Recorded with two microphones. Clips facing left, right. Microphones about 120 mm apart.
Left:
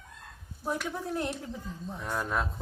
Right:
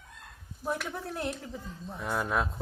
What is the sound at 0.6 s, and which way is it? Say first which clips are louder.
Speech: left 1 dB; centre (ahead or behind).